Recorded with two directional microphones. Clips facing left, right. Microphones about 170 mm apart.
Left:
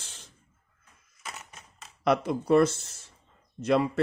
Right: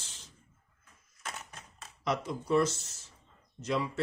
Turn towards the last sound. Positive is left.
turn(degrees=60)  # may be behind; listen again after turning